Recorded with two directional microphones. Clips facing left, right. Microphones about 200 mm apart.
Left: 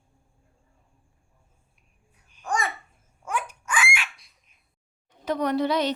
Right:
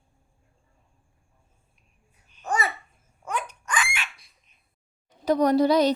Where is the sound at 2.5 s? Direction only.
5° right (ahead or behind).